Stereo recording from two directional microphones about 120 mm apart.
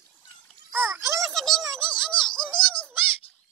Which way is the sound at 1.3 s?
Centre (ahead or behind).